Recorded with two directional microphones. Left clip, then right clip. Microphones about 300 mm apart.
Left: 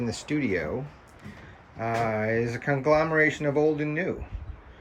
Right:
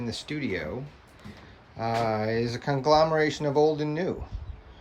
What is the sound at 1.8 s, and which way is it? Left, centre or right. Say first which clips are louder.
Speech: even; centre.